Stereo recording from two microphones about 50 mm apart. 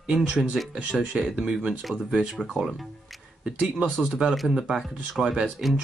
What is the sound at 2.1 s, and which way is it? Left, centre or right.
Speech, centre.